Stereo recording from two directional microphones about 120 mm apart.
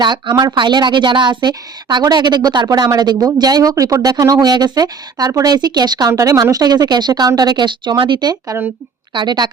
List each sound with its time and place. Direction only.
0.0 s speech: 40° right (ahead or behind)